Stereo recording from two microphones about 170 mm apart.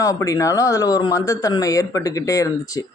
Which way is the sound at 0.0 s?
20° left (ahead or behind).